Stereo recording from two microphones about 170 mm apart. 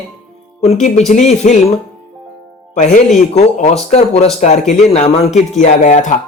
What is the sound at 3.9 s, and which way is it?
Speech, 40° left (ahead or behind).